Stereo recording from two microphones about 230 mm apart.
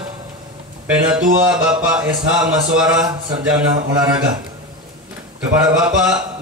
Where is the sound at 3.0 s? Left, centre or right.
Centre.